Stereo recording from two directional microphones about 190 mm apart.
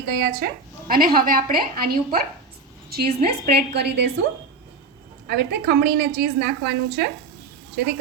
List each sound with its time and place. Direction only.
0.0 s a woman's voice: 55° right (ahead or behind)
5.3 s a woman's voice: 60° right (ahead or behind)